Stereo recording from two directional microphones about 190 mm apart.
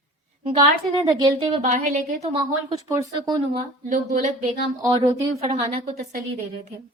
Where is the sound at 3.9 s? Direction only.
40° right (ahead or behind).